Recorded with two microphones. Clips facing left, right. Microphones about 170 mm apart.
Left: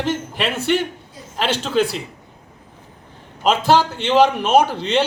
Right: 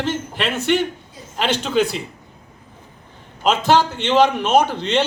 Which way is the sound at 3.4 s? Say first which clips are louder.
Even; 10° left (ahead or behind).